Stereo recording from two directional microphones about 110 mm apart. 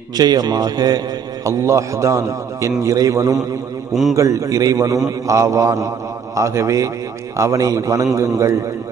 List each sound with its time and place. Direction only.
0.2 s a man's voice: 40° right (ahead or behind)